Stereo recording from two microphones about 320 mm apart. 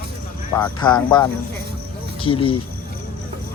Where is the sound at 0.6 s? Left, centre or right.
Centre.